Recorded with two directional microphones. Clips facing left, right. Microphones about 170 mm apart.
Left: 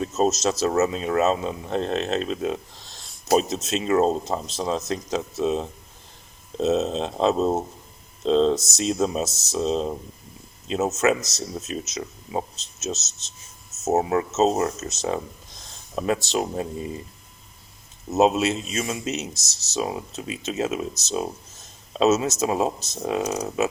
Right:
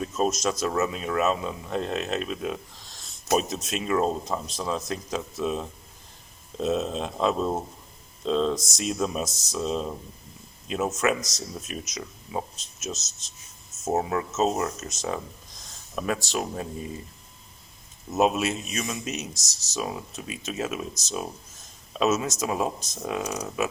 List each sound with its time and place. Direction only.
0.1 s speech: 25° left (ahead or behind)
13.9 s speech: 35° left (ahead or behind)
14.3 s speech: 25° left (ahead or behind)
18.1 s speech: 25° left (ahead or behind)